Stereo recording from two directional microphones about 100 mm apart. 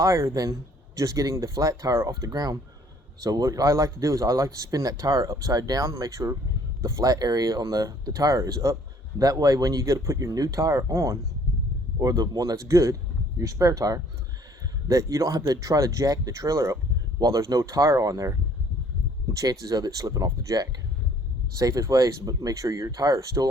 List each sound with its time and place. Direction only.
0.0 s a man's voice: 30° right (ahead or behind)